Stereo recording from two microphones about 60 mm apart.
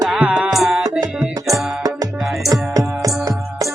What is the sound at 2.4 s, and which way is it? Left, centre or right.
Music, right.